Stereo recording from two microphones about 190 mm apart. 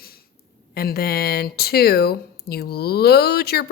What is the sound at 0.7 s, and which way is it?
Speech, 55° left (ahead or behind).